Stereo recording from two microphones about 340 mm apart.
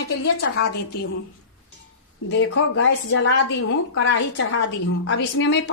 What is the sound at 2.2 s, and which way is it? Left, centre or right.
Speech, left.